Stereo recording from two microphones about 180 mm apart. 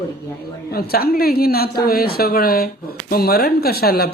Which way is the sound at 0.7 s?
60° left (ahead or behind).